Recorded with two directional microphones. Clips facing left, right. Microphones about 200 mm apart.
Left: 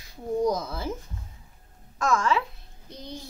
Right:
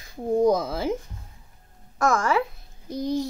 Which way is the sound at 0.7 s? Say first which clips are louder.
Right 6 dB; 90° right.